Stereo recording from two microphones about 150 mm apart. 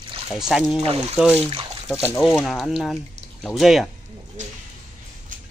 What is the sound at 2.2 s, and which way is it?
Speech, centre (ahead or behind).